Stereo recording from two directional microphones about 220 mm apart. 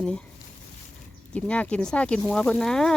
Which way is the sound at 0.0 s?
5° left (ahead or behind).